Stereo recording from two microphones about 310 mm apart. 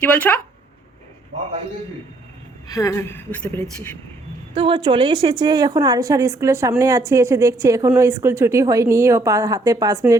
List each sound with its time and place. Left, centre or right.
0.0 s speech: centre
2.6 s a woman's voice: centre
4.5 s a woman's voice: centre